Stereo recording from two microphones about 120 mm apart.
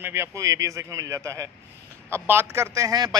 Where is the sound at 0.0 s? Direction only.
20° right (ahead or behind).